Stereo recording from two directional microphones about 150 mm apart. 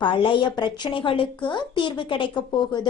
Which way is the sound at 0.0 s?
35° left (ahead or behind).